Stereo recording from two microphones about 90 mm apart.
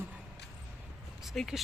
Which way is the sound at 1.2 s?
Centre (ahead or behind).